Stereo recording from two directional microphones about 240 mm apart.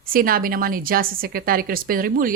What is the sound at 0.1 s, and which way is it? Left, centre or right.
A woman's voice, right.